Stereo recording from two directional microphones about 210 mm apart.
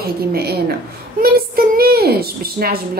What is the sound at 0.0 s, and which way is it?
Speech, 50° right (ahead or behind).